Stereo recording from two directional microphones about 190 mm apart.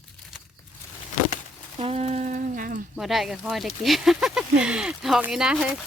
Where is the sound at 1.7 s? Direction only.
30° right (ahead or behind).